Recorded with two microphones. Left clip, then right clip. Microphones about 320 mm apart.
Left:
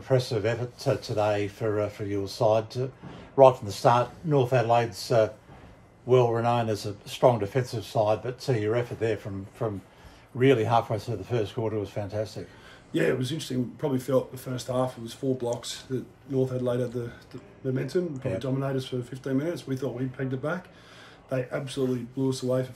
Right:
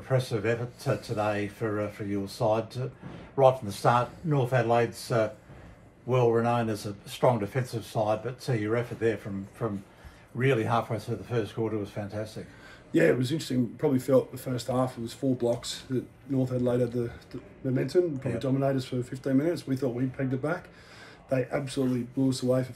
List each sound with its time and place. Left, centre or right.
0.1 s speech: left
12.9 s speech: centre